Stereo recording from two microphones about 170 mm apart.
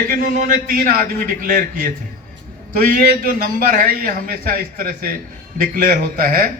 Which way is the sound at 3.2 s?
55° right (ahead or behind).